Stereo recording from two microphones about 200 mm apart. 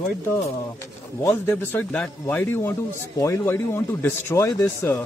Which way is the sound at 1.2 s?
10° left (ahead or behind).